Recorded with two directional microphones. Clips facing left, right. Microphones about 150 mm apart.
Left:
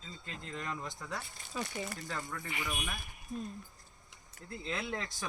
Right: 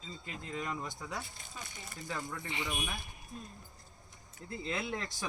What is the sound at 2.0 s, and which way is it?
Speech, centre (ahead or behind).